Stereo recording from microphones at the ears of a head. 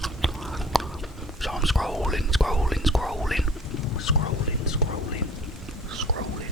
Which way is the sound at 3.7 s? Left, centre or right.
Left.